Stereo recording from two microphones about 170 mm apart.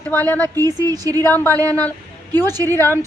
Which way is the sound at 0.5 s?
20° right (ahead or behind).